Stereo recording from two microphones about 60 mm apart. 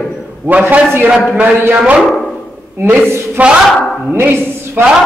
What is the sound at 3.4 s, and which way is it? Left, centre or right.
Speech, right.